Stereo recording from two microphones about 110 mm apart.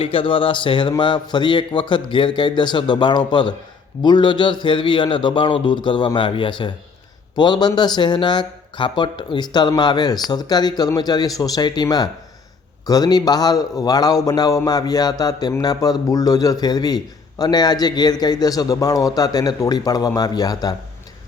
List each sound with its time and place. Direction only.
0.0 s a man's voice: 55° left (ahead or behind); by 20.7 s 35° left (ahead or behind)